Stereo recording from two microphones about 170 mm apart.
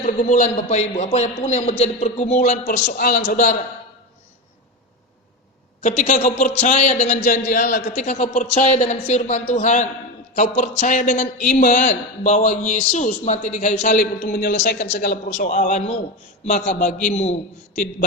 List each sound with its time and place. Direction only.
0.0 s a man's voice: 45° left (ahead or behind)
2.7 s a man's voice: 65° left (ahead or behind)
6.0 s a man's voice: 45° left (ahead or behind)
7.3 s a man's voice: 55° left (ahead or behind)
7.9 s a man's voice: 40° left (ahead or behind); by 15.2 s 65° left (ahead or behind)
15.3 s a man's voice: 40° left (ahead or behind)